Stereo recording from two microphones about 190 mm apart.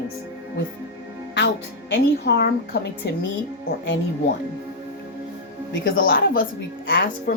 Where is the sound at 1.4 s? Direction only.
75° left (ahead or behind).